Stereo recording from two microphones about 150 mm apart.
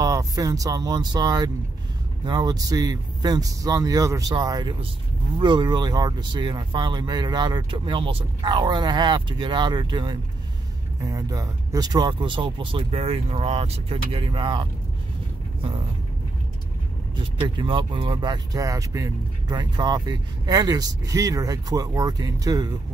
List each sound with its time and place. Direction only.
0.0 s speech: 20° right (ahead or behind)
17.4 s speech: 35° right (ahead or behind)